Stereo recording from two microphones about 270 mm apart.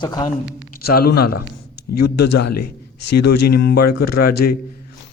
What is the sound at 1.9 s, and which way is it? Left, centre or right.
A man's voice, left.